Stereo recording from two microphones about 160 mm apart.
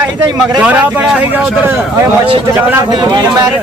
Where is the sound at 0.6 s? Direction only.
10° right (ahead or behind).